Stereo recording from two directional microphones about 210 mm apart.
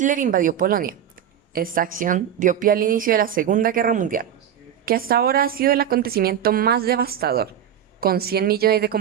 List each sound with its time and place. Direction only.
0.0 s a woman's voice: 40° right (ahead or behind)